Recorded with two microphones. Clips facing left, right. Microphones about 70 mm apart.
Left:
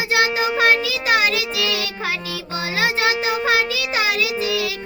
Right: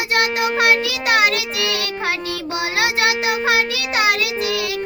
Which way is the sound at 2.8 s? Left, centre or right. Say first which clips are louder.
Even; right.